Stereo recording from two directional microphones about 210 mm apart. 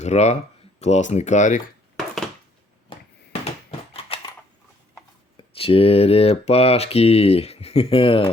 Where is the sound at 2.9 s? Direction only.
30° left (ahead or behind).